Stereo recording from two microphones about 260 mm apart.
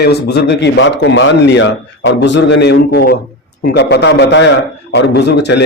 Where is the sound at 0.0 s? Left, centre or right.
Left.